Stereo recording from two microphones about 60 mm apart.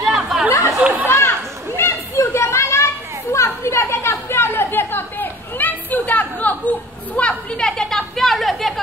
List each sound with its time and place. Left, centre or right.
0.0 s chatter: centre
0.7 s chatter: right
1.0 s children playing: left
7.2 s chatter: centre